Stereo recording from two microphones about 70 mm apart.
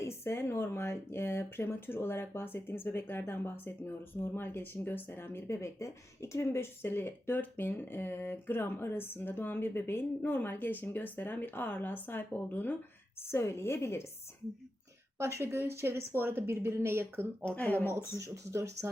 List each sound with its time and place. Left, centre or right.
0.0 s speech: left
13.3 s speech: left
15.2 s speech: right
17.4 s speech: centre
18.2 s speech: right